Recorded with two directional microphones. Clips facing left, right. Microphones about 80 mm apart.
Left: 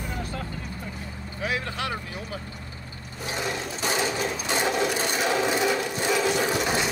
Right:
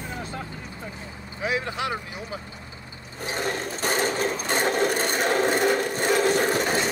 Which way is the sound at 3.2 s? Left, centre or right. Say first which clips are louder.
Right 2 dB; right.